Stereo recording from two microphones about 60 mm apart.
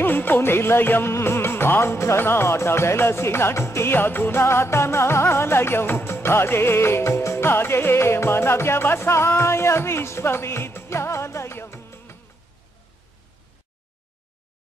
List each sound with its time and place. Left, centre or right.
0.0 s music: left